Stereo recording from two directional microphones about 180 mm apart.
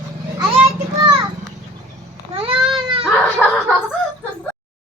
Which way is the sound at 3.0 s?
Centre (ahead or behind).